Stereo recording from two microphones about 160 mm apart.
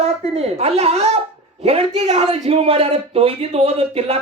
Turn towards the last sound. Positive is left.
turn(degrees=-40)  # may be behind; listen again after turning